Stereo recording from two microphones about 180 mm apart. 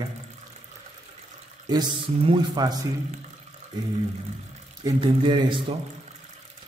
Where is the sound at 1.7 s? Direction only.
25° right (ahead or behind).